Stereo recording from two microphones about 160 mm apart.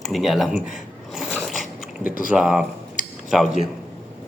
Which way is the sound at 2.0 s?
60° left (ahead or behind).